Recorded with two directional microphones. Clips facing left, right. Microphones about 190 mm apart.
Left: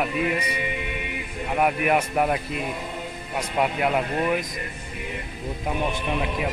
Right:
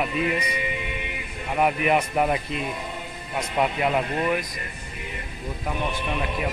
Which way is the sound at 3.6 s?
5° left (ahead or behind).